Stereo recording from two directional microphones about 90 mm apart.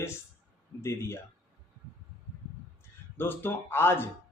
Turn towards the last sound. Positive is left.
turn(degrees=25)  # may be behind; listen again after turning